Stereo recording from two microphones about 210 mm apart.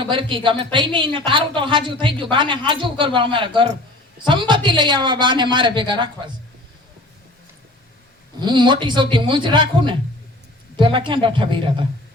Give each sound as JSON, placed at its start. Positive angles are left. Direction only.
{"t": 0.1, "sound": "a woman's voice", "side_deg": -25}
{"t": 8.4, "sound": "a woman's voice", "side_deg": -20}